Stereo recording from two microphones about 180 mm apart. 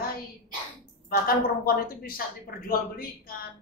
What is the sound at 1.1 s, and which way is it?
A woman's voice, 55° left (ahead or behind).